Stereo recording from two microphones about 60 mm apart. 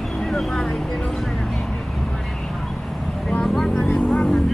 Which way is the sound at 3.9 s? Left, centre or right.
Left.